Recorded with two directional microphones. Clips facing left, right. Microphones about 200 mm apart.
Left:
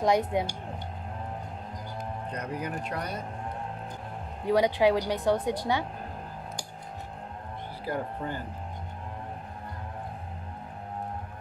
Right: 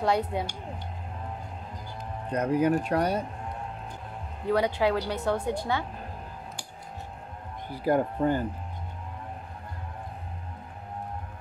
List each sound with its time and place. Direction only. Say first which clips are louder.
0.0 s a woman's voice: left 2 dB; 15° left (ahead or behind)
2.3 s speech: right 12 dB; 50° right (ahead or behind)
4.5 s a woman's voice: left 2 dB; 15° left (ahead or behind)
7.8 s speech: right 9 dB; 50° right (ahead or behind)